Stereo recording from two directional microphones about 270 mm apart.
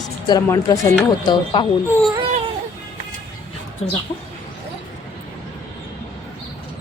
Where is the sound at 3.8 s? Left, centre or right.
Left.